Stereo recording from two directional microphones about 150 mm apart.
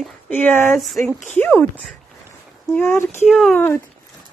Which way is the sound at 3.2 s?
Centre (ahead or behind).